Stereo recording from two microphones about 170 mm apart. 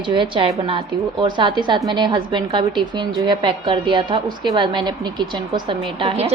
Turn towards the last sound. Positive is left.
turn(degrees=-35)  # may be behind; listen again after turning